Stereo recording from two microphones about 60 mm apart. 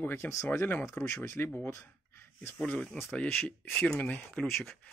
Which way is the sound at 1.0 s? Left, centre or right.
Left.